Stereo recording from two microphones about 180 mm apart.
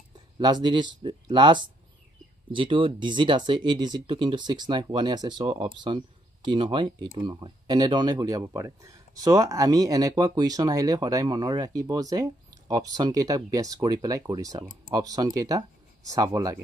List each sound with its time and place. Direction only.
0.4 s speech: 25° right (ahead or behind)